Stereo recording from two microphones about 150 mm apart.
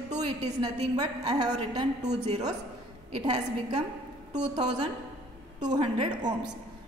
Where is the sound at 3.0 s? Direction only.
35° right (ahead or behind).